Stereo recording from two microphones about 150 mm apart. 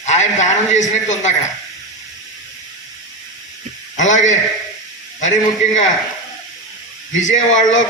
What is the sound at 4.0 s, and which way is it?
Speech, 55° left (ahead or behind).